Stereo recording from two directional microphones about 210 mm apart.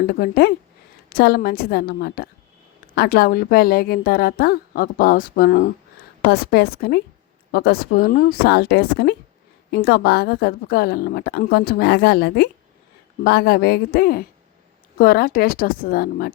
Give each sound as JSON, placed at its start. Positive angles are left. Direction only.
{"t": 0.1, "sound": "a woman's voice", "side_deg": 50}